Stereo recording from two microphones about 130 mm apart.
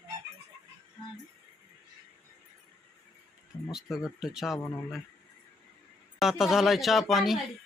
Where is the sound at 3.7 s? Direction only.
5° right (ahead or behind).